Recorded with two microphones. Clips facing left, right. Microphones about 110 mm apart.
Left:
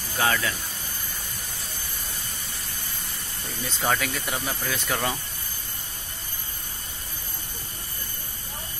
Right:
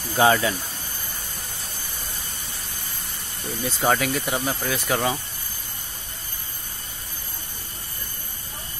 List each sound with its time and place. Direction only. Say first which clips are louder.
0.2 s speech: right 7 dB; 25° right (ahead or behind)
3.6 s speech: right 4 dB; 10° right (ahead or behind)